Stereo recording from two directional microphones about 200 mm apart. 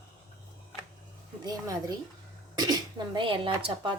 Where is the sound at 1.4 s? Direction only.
20° right (ahead or behind).